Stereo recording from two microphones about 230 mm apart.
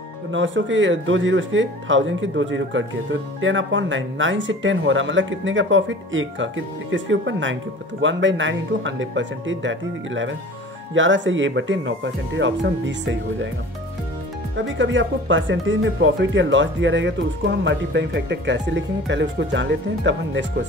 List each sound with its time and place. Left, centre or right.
0.3 s speech: right
14.8 s speech: right